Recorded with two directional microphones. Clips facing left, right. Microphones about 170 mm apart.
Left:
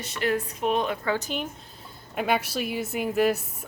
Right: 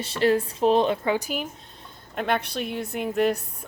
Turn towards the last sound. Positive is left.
turn(degrees=5)  # may be behind; listen again after turning